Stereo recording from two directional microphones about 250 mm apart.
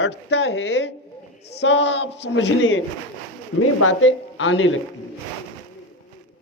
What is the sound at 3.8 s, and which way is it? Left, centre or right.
Speech, left.